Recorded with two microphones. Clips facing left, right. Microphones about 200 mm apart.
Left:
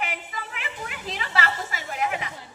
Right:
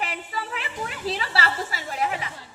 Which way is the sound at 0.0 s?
35° right (ahead or behind).